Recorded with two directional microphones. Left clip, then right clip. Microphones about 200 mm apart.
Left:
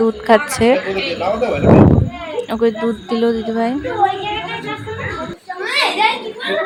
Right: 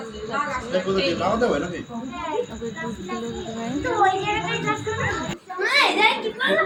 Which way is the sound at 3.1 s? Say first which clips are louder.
Left 15 dB; 45° left (ahead or behind).